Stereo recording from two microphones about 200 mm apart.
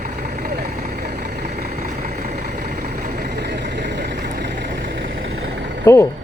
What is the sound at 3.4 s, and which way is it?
Vehicle, 55° right (ahead or behind).